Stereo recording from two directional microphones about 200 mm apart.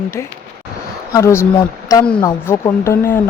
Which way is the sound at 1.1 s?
15° left (ahead or behind).